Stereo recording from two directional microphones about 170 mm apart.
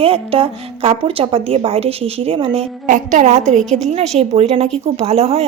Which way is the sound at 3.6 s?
Centre (ahead or behind).